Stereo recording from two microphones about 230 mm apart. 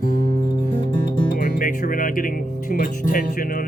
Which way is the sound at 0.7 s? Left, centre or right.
Centre.